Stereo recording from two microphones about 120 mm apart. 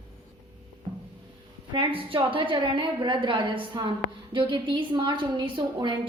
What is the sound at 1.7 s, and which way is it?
A woman's voice, 45° right (ahead or behind).